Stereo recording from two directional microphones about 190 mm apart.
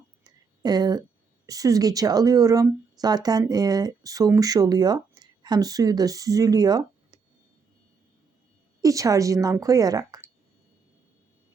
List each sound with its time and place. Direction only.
0.3 s a sound: 20° right (ahead or behind)
1.5 s speech: 20° right (ahead or behind)
8.8 s a woman's voice: 15° right (ahead or behind)